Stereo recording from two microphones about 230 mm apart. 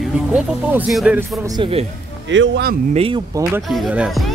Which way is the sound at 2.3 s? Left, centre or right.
Right.